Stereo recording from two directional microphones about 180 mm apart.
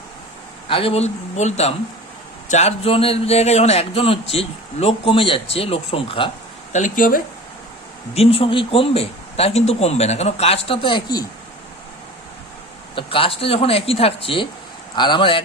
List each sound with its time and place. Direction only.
0.7 s speech: 30° left (ahead or behind)
6.7 s speech: 45° left (ahead or behind)
8.1 s speech: 35° left (ahead or behind)
13.0 s speech: 30° left (ahead or behind)